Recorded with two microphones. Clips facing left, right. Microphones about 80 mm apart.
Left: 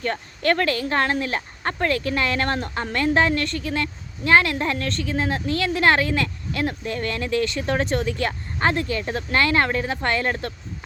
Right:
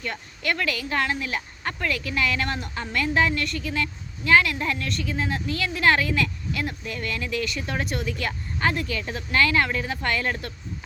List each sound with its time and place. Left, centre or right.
0.0 s speech: left